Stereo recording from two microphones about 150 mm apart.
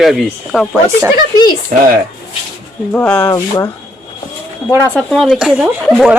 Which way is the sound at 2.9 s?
15° left (ahead or behind).